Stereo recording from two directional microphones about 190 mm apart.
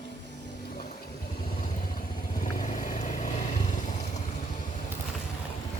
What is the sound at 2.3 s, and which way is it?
Vehicle, 40° left (ahead or behind).